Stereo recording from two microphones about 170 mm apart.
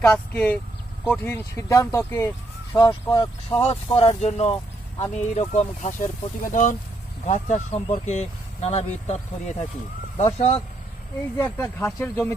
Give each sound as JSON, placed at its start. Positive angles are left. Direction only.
{"t": 0.0, "sound": "speech", "side_deg": 10}
{"t": 2.7, "sound": "speech", "side_deg": 25}
{"t": 3.9, "sound": "speech", "side_deg": 35}
{"t": 11.3, "sound": "speech", "side_deg": 15}